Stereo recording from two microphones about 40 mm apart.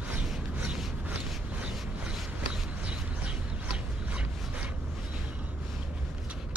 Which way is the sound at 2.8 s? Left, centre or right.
Right.